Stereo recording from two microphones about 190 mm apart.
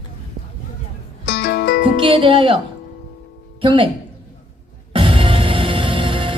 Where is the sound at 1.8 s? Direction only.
25° right (ahead or behind).